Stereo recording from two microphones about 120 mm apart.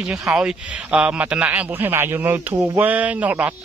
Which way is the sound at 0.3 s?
5° right (ahead or behind).